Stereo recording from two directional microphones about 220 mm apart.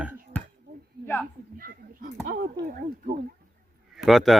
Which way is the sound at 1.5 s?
40° right (ahead or behind).